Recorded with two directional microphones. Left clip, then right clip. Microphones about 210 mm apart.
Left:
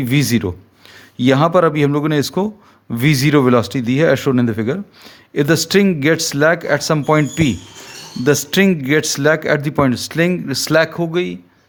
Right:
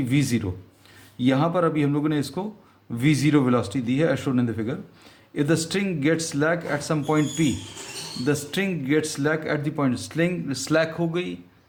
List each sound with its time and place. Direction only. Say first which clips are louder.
0.0 s a man's voice: left 7 dB; 45° left (ahead or behind)